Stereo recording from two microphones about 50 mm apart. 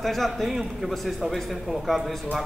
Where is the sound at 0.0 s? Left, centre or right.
Centre.